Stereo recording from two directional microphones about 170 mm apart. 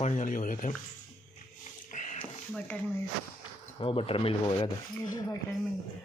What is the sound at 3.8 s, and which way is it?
Speech, 30° left (ahead or behind).